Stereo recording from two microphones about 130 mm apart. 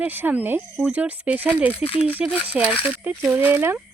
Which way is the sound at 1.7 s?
50° left (ahead or behind).